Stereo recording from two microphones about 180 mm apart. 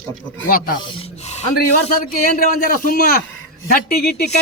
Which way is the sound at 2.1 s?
55° left (ahead or behind).